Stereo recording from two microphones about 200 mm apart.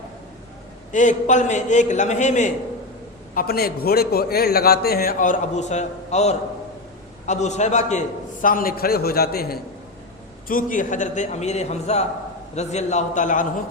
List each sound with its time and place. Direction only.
0.9 s a man's voice: 40° left (ahead or behind)
3.3 s a man's voice: 50° left (ahead or behind)